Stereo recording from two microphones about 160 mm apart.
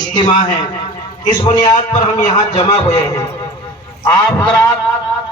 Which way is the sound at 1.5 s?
25° left (ahead or behind).